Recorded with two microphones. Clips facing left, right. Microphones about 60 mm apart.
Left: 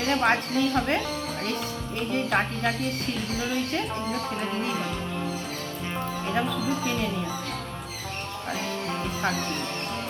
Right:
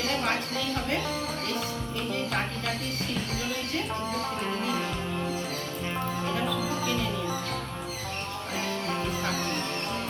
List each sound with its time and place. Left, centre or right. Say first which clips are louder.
0.2 s a woman's voice: left 6 dB; left
2.1 s a woman's voice: left 7 dB; left